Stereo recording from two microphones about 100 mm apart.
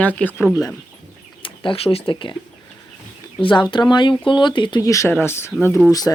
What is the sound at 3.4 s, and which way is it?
Speech, 55° left (ahead or behind).